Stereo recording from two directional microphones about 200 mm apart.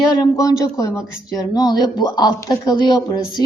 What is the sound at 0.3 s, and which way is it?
A man's voice, 15° left (ahead or behind).